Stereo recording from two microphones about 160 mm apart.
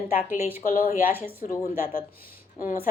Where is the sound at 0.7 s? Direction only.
60° left (ahead or behind).